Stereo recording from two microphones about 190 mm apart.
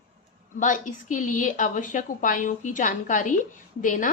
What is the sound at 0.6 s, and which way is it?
A woman's voice, 40° left (ahead or behind).